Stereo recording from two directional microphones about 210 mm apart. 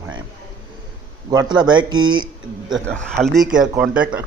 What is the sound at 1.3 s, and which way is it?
Speech, 20° right (ahead or behind).